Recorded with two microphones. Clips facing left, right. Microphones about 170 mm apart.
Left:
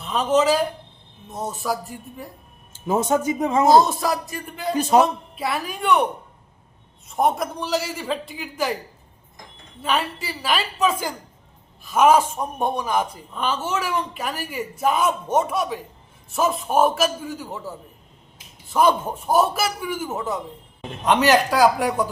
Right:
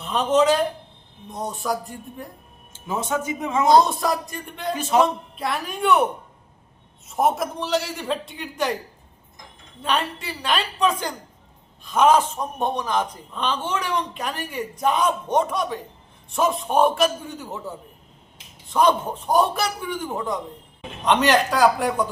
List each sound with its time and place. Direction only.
0.0 s a man's voice: centre (ahead or behind)
2.8 s speech: 45° left (ahead or behind)
3.7 s a man's voice: centre (ahead or behind)
4.9 s speech: 40° left (ahead or behind)
5.4 s a man's voice: centre (ahead or behind)
7.1 s a man's voice: centre (ahead or behind)
9.8 s a man's voice: 5° left (ahead or behind)